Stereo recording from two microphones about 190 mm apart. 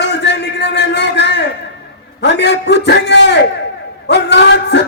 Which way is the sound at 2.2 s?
65° left (ahead or behind).